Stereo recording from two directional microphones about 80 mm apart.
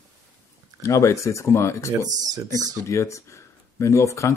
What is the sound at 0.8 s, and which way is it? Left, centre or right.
Speech, left.